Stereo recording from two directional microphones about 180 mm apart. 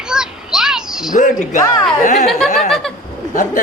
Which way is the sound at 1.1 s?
45° left (ahead or behind).